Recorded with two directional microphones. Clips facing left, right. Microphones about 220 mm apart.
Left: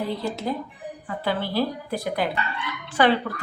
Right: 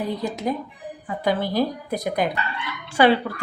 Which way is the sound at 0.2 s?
15° right (ahead or behind).